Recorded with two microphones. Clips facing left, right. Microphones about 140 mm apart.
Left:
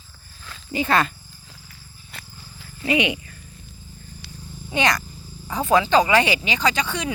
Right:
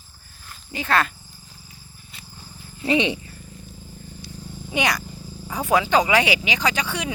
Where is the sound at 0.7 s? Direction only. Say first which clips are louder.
Left 2 dB; centre (ahead or behind).